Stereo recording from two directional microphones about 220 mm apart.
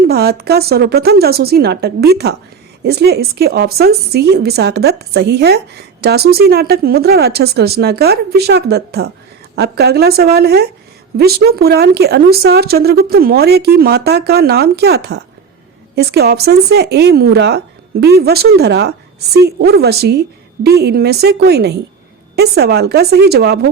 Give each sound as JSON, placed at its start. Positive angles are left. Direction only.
{"t": 0.0, "sound": "speech", "side_deg": -45}